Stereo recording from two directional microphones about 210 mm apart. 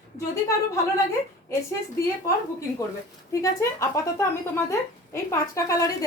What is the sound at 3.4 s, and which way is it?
A woman's voice, 15° left (ahead or behind).